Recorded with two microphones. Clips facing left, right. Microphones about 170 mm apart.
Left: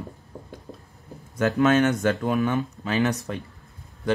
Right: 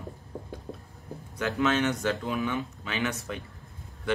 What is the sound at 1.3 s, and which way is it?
Speech, 45° left (ahead or behind).